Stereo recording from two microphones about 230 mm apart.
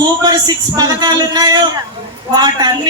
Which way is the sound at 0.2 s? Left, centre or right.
Centre.